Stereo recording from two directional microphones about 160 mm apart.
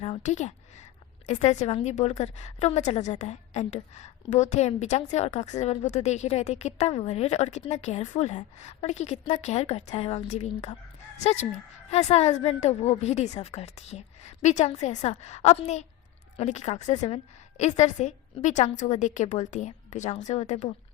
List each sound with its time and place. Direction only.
0.2 s a woman's voice: 45° left (ahead or behind)